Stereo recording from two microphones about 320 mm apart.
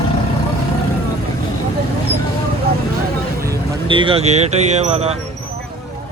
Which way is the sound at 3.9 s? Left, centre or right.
Centre.